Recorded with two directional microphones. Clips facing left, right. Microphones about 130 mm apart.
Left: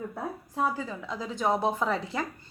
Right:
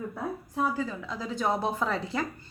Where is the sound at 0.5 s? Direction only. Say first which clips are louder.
Even; 25° left (ahead or behind).